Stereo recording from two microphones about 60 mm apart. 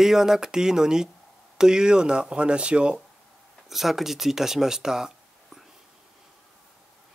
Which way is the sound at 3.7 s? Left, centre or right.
Centre.